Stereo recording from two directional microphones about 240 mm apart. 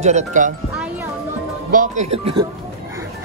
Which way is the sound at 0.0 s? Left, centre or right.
Right.